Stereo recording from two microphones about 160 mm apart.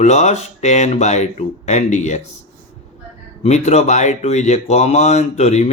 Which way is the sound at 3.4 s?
45° left (ahead or behind).